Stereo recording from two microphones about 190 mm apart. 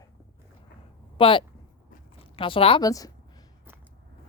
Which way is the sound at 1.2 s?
25° left (ahead or behind).